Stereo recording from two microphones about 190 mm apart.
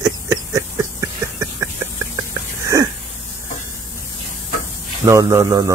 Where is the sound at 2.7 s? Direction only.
15° right (ahead or behind).